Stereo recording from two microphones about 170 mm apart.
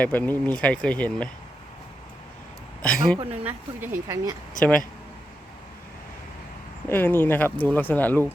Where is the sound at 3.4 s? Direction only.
10° right (ahead or behind).